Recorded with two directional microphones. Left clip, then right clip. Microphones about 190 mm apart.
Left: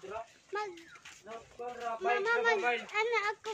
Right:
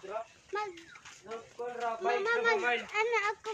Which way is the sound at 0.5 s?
20° left (ahead or behind).